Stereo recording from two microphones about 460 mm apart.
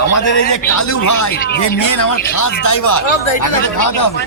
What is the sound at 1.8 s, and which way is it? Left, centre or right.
A man's voice, left.